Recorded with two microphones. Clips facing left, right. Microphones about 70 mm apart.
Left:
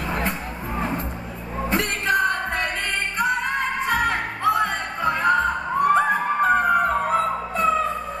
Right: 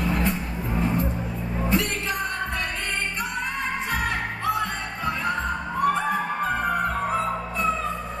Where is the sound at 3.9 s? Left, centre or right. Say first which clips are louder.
Left 4 dB; left.